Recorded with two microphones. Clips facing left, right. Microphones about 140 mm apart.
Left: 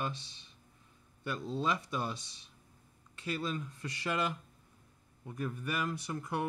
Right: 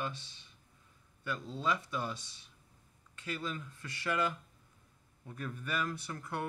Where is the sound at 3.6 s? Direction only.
20° left (ahead or behind).